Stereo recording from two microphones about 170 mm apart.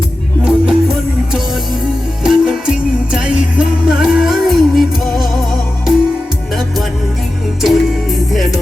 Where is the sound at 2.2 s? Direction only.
5° right (ahead or behind).